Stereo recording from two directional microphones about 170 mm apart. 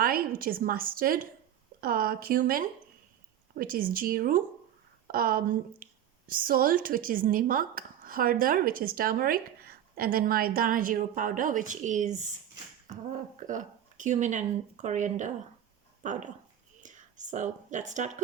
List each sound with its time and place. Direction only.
0.0 s speech: 60° right (ahead or behind)
13.5 s speech: 50° right (ahead or behind)